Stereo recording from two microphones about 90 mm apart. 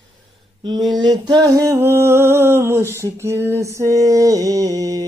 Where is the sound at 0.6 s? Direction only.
55° right (ahead or behind).